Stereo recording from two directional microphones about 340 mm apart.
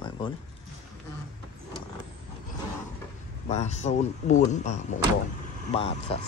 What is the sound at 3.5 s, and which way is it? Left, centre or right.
A man's voice, centre.